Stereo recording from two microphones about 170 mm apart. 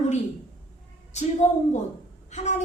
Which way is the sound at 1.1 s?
40° left (ahead or behind).